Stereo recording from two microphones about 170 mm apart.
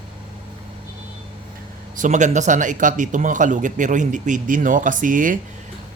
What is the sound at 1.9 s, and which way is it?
Speech, 45° right (ahead or behind).